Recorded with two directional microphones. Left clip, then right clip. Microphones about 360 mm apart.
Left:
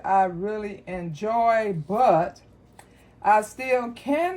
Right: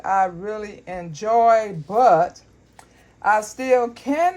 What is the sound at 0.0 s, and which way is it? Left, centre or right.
Speech, right.